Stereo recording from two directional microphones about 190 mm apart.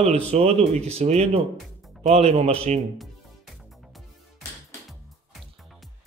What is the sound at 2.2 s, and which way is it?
Speech, 35° right (ahead or behind).